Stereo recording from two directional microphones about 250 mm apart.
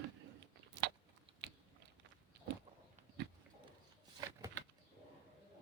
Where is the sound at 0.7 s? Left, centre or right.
Right.